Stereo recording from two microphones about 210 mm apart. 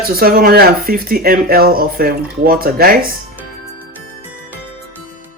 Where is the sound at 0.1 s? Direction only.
45° right (ahead or behind).